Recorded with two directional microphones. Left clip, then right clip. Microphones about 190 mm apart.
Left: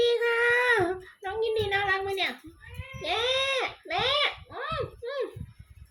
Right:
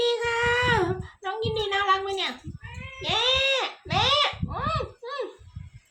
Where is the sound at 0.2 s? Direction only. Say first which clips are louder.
Even; 15° right (ahead or behind).